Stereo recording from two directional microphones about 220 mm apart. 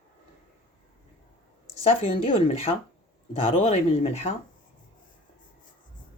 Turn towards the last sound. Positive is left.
turn(degrees=30)  # may be behind; listen again after turning